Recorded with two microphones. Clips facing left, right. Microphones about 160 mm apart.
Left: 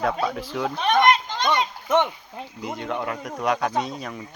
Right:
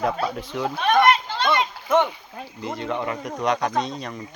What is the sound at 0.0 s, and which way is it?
Speech, centre (ahead or behind).